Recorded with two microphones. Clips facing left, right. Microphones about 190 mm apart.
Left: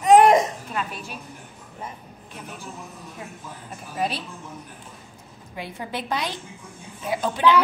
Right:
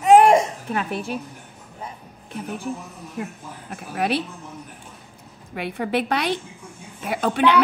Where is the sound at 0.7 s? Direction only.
60° right (ahead or behind).